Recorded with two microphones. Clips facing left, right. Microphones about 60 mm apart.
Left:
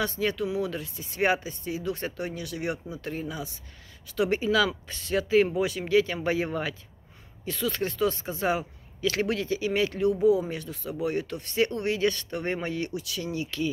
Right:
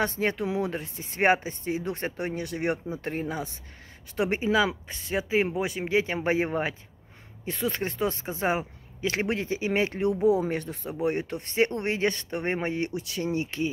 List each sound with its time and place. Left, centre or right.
0.0 s speech: right
4.2 s speech: right